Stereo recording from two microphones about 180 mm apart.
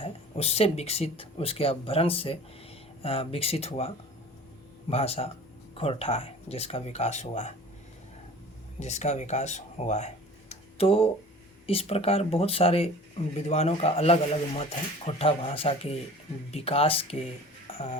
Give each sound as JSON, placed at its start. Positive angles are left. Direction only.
{"t": 0.0, "sound": "speech", "side_deg": 35}
{"t": 8.8, "sound": "speech", "side_deg": 40}
{"t": 10.5, "sound": "a sound", "side_deg": 30}
{"t": 11.6, "sound": "speech", "side_deg": 30}
{"t": 17.7, "sound": "music", "side_deg": 35}